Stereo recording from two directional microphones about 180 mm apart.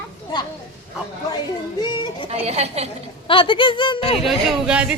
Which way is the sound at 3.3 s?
30° left (ahead or behind).